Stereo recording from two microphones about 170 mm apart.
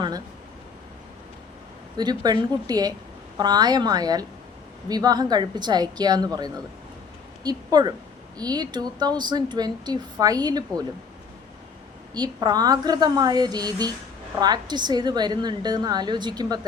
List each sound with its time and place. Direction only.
2.0 s a woman's voice: 25° right (ahead or behind)
12.1 s a woman's voice: 25° right (ahead or behind)